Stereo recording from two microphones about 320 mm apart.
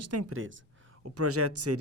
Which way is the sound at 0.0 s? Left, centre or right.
Right.